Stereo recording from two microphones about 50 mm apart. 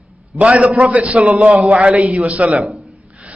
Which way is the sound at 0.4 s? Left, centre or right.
Right.